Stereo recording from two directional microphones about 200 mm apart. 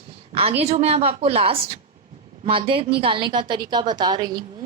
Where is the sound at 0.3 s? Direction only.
30° right (ahead or behind).